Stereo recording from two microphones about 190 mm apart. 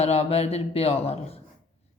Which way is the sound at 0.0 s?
35° left (ahead or behind).